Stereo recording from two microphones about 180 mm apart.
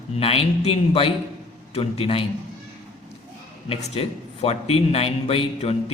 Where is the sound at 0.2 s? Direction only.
35° left (ahead or behind).